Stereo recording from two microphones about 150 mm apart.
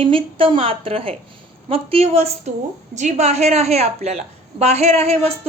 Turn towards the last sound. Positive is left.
turn(degrees=-45)  # may be behind; listen again after turning